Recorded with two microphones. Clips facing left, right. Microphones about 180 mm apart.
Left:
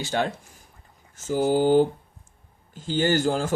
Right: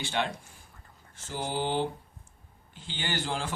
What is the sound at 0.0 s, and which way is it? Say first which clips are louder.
Speech: left 5 dB; 40° left (ahead or behind).